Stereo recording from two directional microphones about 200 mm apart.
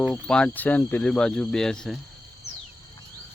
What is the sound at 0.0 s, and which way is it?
Speech, 5° left (ahead or behind).